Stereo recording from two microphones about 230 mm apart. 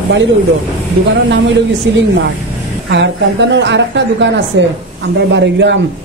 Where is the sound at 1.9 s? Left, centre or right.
Right.